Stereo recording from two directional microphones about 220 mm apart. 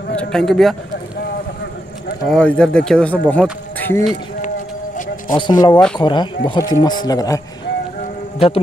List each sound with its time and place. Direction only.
0.1 s speech: 5° left (ahead or behind)
2.2 s speech: 5° left (ahead or behind)
5.3 s speech: 20° left (ahead or behind)